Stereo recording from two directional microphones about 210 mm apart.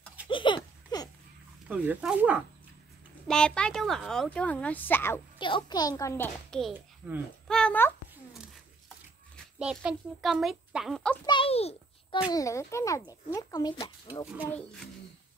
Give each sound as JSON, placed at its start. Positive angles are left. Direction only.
{"t": 0.3, "sound": "a sound", "side_deg": 20}
{"t": 1.7, "sound": "a woman's voice", "side_deg": -5}
{"t": 5.4, "sound": "speech", "side_deg": 20}
{"t": 7.4, "sound": "a sound", "side_deg": 5}
{"t": 9.6, "sound": "a woman's voice", "side_deg": -5}
{"t": 11.2, "sound": "a child's voice", "side_deg": 25}
{"t": 12.3, "sound": "speech", "side_deg": 15}
{"t": 14.3, "sound": "speech", "side_deg": -5}